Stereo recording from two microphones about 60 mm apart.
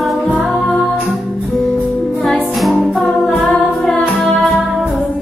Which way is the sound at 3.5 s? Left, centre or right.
Left.